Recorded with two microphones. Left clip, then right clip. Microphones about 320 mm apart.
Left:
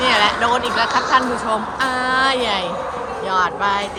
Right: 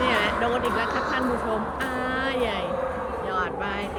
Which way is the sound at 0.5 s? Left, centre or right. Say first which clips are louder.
Left 7 dB; centre.